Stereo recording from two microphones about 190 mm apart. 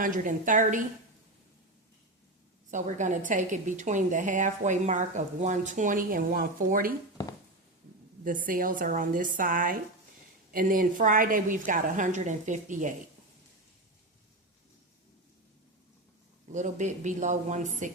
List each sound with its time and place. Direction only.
0.0 s a woman's voice: 45° right (ahead or behind)
2.6 s a woman's voice: 40° right (ahead or behind)
8.2 s a woman's voice: 45° right (ahead or behind)
16.5 s a woman's voice: 40° right (ahead or behind)